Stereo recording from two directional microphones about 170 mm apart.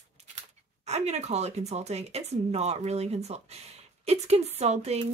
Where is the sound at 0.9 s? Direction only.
40° right (ahead or behind).